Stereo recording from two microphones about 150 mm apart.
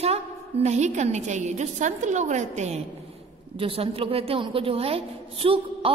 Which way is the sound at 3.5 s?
40° right (ahead or behind).